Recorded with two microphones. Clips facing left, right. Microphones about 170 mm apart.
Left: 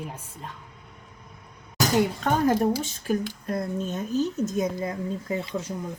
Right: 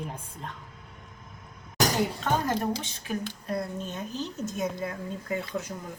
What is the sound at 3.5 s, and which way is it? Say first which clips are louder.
Speech: left 4 dB; 45° left (ahead or behind).